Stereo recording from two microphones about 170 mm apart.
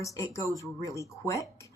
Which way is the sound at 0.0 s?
20° left (ahead or behind).